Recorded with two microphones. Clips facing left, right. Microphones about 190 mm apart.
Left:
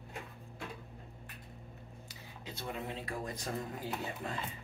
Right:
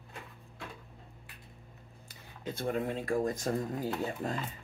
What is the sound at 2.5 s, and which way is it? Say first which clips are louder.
Speech: right 8 dB; 50° right (ahead or behind).